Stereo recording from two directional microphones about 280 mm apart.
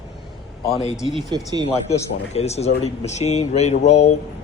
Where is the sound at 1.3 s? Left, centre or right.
Centre.